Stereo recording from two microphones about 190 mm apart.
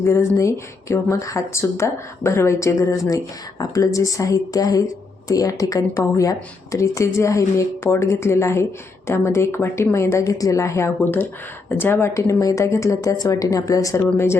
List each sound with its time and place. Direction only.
0.0 s speech: 15° left (ahead or behind)